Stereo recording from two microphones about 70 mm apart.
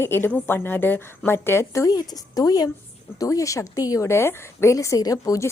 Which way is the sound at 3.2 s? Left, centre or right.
Left.